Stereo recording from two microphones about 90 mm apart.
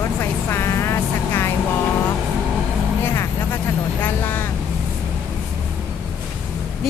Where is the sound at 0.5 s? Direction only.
30° left (ahead or behind).